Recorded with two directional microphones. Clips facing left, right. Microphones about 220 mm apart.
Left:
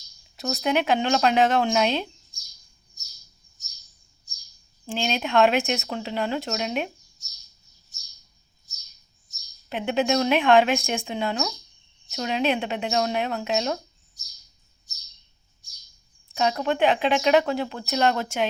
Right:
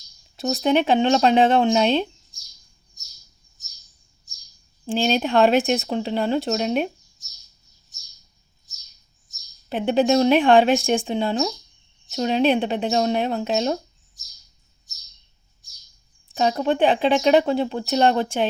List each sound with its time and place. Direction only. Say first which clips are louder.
0.3 s speech: right 5 dB; 30° right (ahead or behind)
4.9 s speech: right 3 dB; 35° right (ahead or behind)
9.6 s speech: right 5 dB; 35° right (ahead or behind)
16.4 s speech: right 3 dB; 35° right (ahead or behind)